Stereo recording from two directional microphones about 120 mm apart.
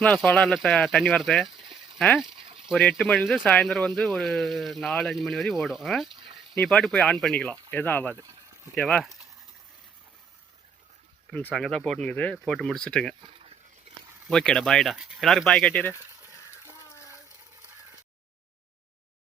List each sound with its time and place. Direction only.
0.0 s speech: 5° left (ahead or behind)
1.6 s a sound: 45° right (ahead or behind)
2.9 s speech: centre (ahead or behind)
8.1 s speech: 30° right (ahead or behind)
8.7 s speech: 5° left (ahead or behind)
11.3 s speech: 5° left (ahead or behind)
14.3 s speech: 5° left (ahead or behind)
16.9 s water: 25° left (ahead or behind)